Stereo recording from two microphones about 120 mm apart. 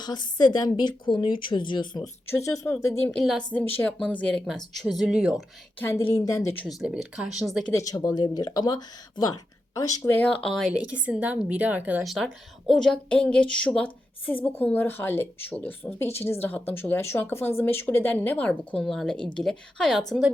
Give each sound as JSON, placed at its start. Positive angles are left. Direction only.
{"t": 0.0, "sound": "a woman's voice", "side_deg": 35}
{"t": 2.3, "sound": "speech", "side_deg": 25}
{"t": 3.1, "sound": "speech", "side_deg": 5}
{"t": 3.6, "sound": "a woman's voice", "side_deg": 20}
{"t": 5.8, "sound": "a woman's voice", "side_deg": 15}
{"t": 6.7, "sound": "speech", "side_deg": -5}
{"t": 7.7, "sound": "a woman's voice", "side_deg": 30}
{"t": 10.0, "sound": "a woman's voice", "side_deg": 15}
{"t": 10.8, "sound": "a woman's voice", "side_deg": -10}
{"t": 12.0, "sound": "a woman's voice", "side_deg": 0}